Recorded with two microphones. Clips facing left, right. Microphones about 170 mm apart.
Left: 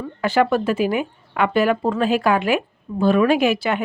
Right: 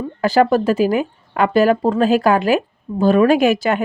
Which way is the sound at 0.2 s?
40° right (ahead or behind).